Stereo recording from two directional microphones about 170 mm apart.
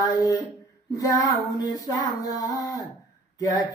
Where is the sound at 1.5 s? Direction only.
20° left (ahead or behind).